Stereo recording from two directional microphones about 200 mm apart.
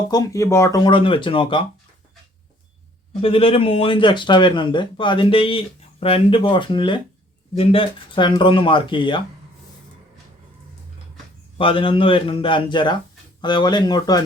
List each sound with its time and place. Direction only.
0.1 s speech: 15° left (ahead or behind)
3.1 s speech: 30° left (ahead or behind)
11.5 s speech: 25° left (ahead or behind)